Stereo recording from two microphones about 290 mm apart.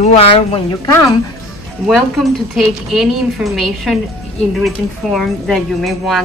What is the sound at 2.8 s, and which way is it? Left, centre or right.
Speech, centre.